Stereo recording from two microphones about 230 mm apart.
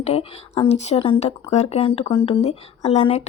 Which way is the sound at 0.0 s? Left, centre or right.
Left.